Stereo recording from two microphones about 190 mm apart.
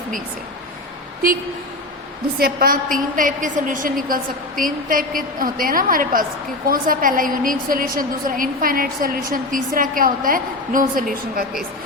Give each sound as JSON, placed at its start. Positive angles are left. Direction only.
{"t": 2.4, "sound": "a woman's voice", "side_deg": -50}